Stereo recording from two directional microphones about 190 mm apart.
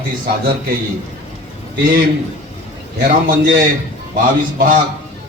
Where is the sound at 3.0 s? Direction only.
55° right (ahead or behind).